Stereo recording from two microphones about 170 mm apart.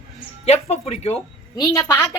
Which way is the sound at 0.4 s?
40° left (ahead or behind).